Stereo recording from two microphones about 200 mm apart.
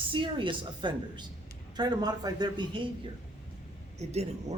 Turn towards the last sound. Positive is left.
turn(degrees=-35)  # may be behind; listen again after turning